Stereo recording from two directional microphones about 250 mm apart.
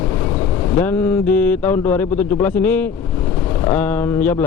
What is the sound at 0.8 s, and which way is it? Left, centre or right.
Speech, centre.